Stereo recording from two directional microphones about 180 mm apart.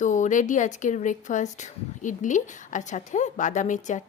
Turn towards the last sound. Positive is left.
turn(degrees=45)  # may be behind; listen again after turning